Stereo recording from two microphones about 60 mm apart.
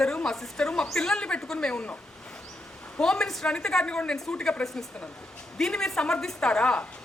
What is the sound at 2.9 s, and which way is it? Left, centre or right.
Speech, centre.